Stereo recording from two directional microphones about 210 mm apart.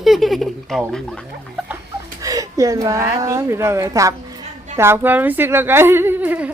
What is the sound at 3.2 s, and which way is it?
Speech, 15° right (ahead or behind).